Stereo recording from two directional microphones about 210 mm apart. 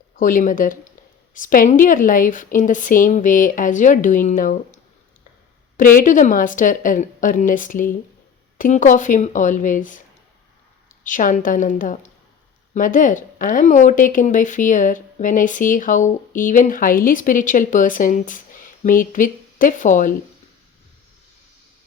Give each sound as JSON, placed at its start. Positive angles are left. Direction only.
{"t": 0.2, "sound": "a woman's voice", "side_deg": 40}
{"t": 5.7, "sound": "a woman's voice", "side_deg": 40}
{"t": 11.0, "sound": "a woman's voice", "side_deg": 40}